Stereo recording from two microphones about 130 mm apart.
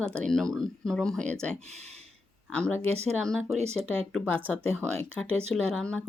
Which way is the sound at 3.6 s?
55° right (ahead or behind).